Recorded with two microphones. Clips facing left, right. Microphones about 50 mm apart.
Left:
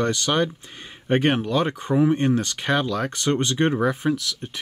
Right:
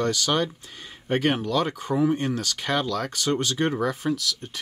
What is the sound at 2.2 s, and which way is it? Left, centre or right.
Speech, left.